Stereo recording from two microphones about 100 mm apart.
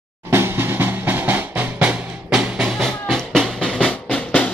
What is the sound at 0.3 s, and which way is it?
Drum, 25° right (ahead or behind).